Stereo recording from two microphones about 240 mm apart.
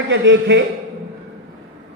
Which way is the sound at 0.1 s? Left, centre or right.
Right.